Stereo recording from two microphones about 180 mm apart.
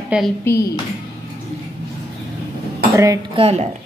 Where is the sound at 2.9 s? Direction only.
20° right (ahead or behind).